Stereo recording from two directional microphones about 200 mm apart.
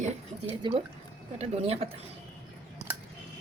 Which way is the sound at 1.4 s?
30° right (ahead or behind).